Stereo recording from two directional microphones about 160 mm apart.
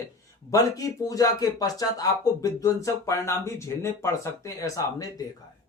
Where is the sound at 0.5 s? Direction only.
20° left (ahead or behind).